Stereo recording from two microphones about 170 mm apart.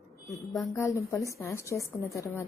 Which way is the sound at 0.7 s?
15° left (ahead or behind).